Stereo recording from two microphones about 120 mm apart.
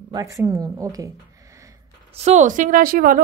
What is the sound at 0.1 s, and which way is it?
Speech, 25° right (ahead or behind).